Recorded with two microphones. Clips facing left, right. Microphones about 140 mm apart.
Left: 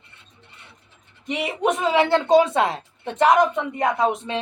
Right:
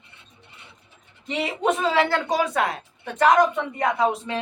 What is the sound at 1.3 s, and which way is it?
A woman's voice, 15° left (ahead or behind).